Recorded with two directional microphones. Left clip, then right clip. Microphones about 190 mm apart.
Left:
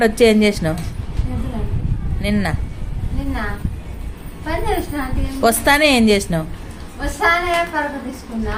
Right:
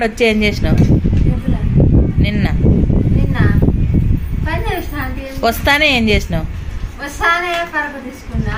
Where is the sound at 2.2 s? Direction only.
5° left (ahead or behind).